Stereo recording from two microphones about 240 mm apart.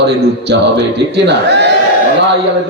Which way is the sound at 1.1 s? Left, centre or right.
Right.